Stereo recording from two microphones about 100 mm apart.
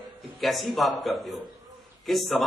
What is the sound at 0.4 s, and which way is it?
A man's voice, centre (ahead or behind).